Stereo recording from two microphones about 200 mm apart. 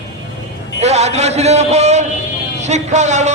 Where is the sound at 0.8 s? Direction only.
35° right (ahead or behind).